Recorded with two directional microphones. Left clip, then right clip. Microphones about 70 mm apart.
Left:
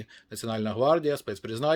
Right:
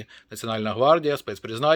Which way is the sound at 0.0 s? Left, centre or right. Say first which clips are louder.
Right 3 dB; left.